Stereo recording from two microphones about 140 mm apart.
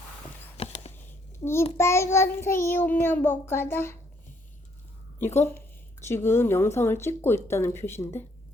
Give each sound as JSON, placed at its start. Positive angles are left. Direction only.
{"t": 0.5, "sound": "a sound", "side_deg": 45}
{"t": 1.4, "sound": "a child's voice", "side_deg": 20}
{"t": 5.2, "sound": "a woman's voice", "side_deg": 15}